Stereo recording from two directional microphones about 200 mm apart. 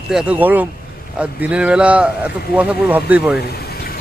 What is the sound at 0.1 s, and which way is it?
Speech, 5° right (ahead or behind).